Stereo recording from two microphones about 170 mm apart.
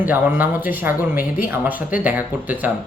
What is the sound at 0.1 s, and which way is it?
Speech, 10° right (ahead or behind).